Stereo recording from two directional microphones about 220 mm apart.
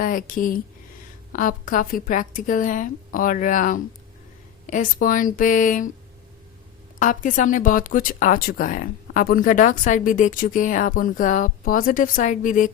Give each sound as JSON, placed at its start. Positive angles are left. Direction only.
{"t": 0.0, "sound": "speech", "side_deg": 40}
{"t": 7.0, "sound": "speech", "side_deg": 35}